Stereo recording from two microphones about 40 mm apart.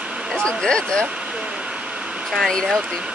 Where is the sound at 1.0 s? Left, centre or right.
Right.